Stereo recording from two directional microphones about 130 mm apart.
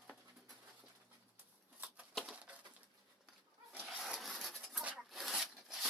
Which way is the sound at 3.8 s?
Centre (ahead or behind).